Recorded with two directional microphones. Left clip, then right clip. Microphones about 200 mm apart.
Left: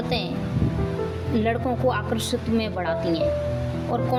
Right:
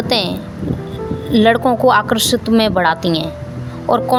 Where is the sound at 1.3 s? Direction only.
55° right (ahead or behind).